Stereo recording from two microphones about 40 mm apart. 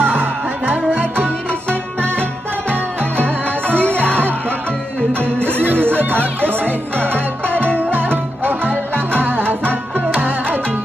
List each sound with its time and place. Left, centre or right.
0.0 s music: right
1.2 s music: left
3.7 s music: left
5.9 s music: right
9.1 s music: right